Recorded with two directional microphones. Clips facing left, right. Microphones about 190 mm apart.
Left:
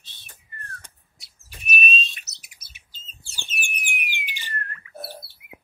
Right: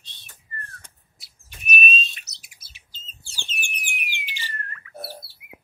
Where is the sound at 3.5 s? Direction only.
Centre (ahead or behind).